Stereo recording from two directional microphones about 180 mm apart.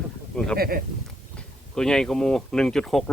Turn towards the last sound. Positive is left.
turn(degrees=0)  # may be behind; listen again after turning